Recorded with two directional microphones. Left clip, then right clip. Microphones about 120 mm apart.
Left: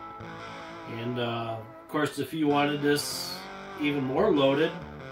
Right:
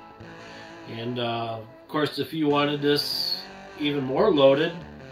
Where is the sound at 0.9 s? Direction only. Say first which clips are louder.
Right 3 dB; 15° left (ahead or behind).